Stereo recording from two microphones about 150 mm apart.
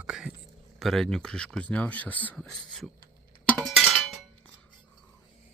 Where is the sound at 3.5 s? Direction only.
5° left (ahead or behind).